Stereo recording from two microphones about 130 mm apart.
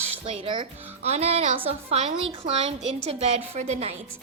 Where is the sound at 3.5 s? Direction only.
60° right (ahead or behind).